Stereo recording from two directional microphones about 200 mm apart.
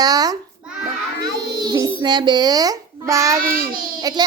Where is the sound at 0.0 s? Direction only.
20° right (ahead or behind).